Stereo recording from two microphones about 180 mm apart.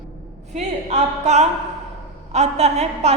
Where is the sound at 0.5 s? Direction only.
40° right (ahead or behind).